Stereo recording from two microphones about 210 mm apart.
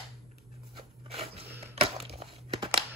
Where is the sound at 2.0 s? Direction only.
30° right (ahead or behind).